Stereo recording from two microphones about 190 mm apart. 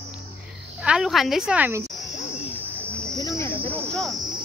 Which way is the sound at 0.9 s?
Centre (ahead or behind).